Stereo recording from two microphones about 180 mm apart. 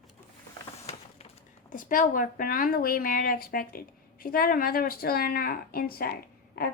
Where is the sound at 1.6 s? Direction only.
50° left (ahead or behind).